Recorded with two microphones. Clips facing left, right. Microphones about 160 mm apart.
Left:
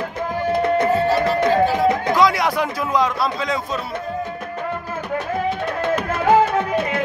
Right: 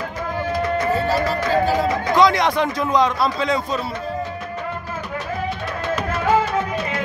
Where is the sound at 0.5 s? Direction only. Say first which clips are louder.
Left 4 dB; 60° left (ahead or behind).